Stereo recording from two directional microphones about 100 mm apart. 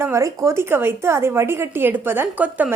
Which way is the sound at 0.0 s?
30° right (ahead or behind).